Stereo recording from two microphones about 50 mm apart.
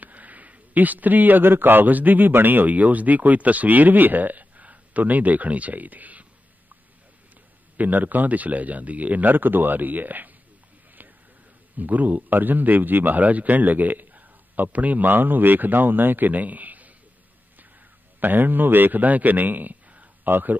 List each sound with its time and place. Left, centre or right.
0.0 s speech: right
7.7 s a man's voice: right
11.0 s a sound: right
11.7 s a man's voice: right
18.2 s a man's voice: right